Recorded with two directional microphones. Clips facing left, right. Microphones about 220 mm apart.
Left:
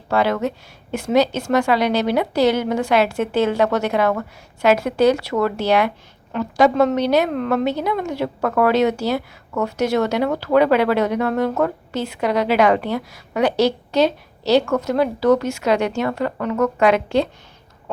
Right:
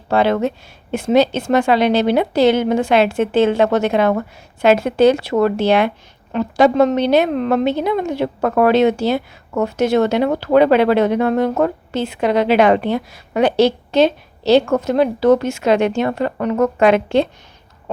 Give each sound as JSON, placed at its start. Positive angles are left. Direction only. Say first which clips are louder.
{"t": 0.1, "sound": "a woman's voice", "louder": "right 3 dB", "side_deg": -25}